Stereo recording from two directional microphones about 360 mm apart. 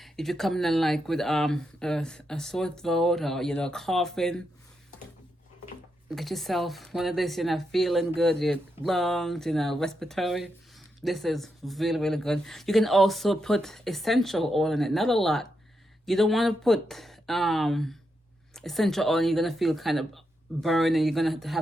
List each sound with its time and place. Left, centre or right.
0.0 s speech: centre
6.1 s speech: centre